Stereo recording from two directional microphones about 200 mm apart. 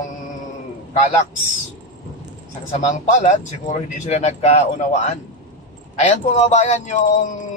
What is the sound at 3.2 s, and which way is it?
A man's voice, 35° left (ahead or behind).